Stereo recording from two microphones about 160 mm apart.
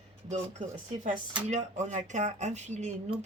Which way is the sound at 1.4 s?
45° right (ahead or behind).